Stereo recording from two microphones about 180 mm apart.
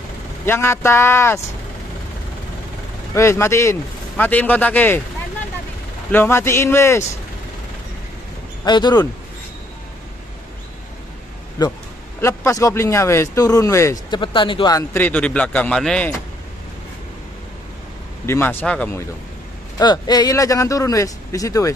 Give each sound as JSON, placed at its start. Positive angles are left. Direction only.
{"t": 0.5, "sound": "speech", "side_deg": 15}
{"t": 3.2, "sound": "speech", "side_deg": 15}
{"t": 6.1, "sound": "speech", "side_deg": 15}
{"t": 8.6, "sound": "speech", "side_deg": 25}
{"t": 11.6, "sound": "speech", "side_deg": 20}
{"t": 14.2, "sound": "speech", "side_deg": 30}
{"t": 18.2, "sound": "speech", "side_deg": 15}
{"t": 19.8, "sound": "speech", "side_deg": 25}